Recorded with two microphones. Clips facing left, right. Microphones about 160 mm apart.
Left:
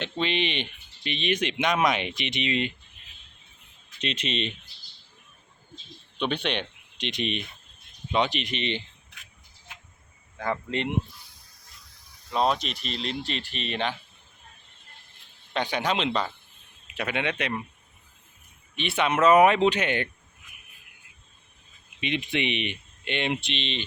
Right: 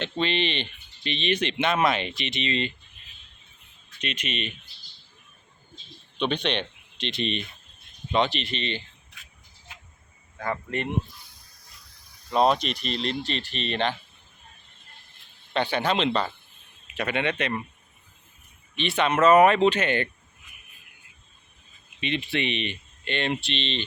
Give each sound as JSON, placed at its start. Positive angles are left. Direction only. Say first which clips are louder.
{"t": 0.0, "sound": "speech", "louder": "right 1 dB", "side_deg": 10}
{"t": 4.0, "sound": "speech", "louder": "left 2 dB", "side_deg": 30}
{"t": 6.1, "sound": "speech", "louder": "right 2 dB", "side_deg": 10}
{"t": 10.7, "sound": "speech", "louder": "left 1 dB", "side_deg": 20}
{"t": 12.3, "sound": "speech", "louder": "right 3 dB", "side_deg": -5}
{"t": 15.5, "sound": "speech", "louder": "right 2 dB", "side_deg": 10}
{"t": 18.8, "sound": "speech", "louder": "right 1 dB", "side_deg": 10}
{"t": 22.0, "sound": "speech", "louder": "even", "side_deg": 15}